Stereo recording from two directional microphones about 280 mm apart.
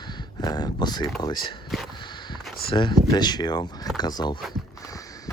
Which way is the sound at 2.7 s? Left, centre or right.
Centre.